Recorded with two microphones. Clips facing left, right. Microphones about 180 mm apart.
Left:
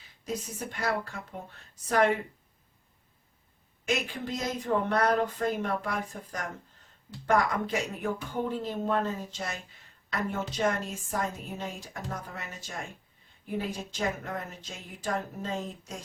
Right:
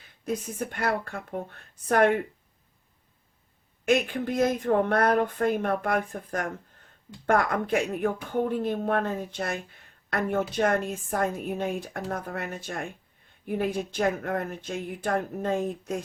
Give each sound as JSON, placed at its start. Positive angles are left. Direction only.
{"t": 0.3, "sound": "a woman's voice", "side_deg": -55}
{"t": 3.8, "sound": "a woman's voice", "side_deg": -55}